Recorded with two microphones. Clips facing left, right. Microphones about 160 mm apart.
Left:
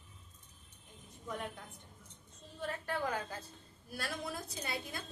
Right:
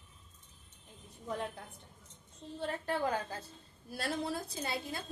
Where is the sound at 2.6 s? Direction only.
30° right (ahead or behind).